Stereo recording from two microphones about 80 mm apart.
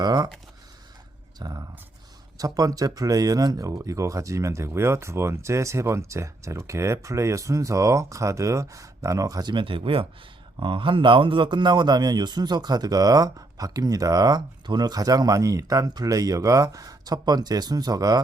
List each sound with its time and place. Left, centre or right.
0.0 s a sound: right
1.4 s speech: right
9.5 s speech: right